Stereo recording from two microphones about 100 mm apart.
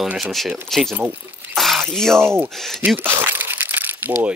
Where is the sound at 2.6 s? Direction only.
5° left (ahead or behind).